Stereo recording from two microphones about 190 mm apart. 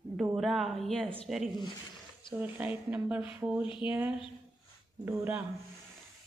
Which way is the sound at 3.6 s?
25° left (ahead or behind).